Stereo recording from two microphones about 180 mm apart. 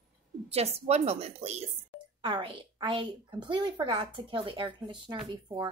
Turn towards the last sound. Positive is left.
turn(degrees=-25)  # may be behind; listen again after turning